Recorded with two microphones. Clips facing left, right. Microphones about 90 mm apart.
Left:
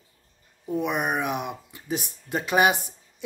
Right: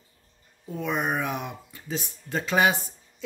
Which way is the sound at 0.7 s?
15° left (ahead or behind).